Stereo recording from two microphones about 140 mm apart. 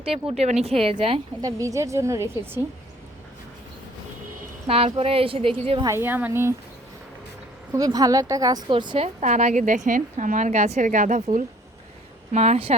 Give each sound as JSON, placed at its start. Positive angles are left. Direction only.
{"t": 0.0, "sound": "speech", "side_deg": -45}
{"t": 1.4, "sound": "a woman's voice", "side_deg": -25}
{"t": 4.6, "sound": "speech", "side_deg": -45}
{"t": 5.8, "sound": "speech", "side_deg": -20}
{"t": 7.7, "sound": "a woman's voice", "side_deg": -25}
{"t": 9.2, "sound": "a woman's voice", "side_deg": -60}
{"t": 12.3, "sound": "speech", "side_deg": -50}